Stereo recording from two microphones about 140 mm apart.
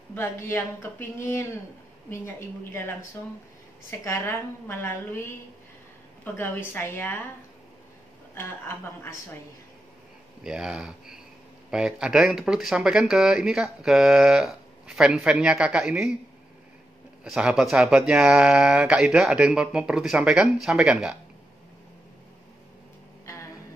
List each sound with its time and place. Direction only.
0.1 s speech: 15° left (ahead or behind)
4.0 s speech: 20° left (ahead or behind)
8.4 s speech: 15° left (ahead or behind)
10.4 s speech: 5° right (ahead or behind)
17.2 s speech: 5° right (ahead or behind)
23.2 s music: 20° left (ahead or behind)